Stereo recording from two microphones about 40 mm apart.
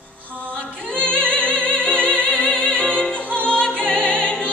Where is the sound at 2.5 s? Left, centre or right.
Left.